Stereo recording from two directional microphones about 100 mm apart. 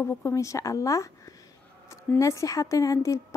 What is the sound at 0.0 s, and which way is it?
A woman's voice, 30° left (ahead or behind).